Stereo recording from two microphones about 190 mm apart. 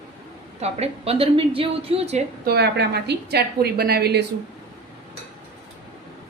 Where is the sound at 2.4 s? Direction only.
60° right (ahead or behind).